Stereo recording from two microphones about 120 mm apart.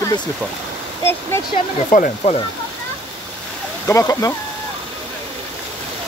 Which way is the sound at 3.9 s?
25° left (ahead or behind).